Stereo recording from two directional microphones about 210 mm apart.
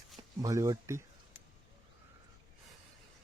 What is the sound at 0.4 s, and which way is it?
Speech, 15° right (ahead or behind).